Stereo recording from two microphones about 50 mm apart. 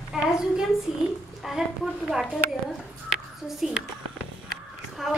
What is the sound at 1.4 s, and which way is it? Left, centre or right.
Speech, centre.